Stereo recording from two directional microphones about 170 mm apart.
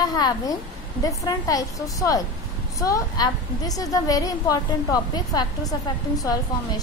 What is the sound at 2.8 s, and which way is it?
A woman's voice, 20° left (ahead or behind).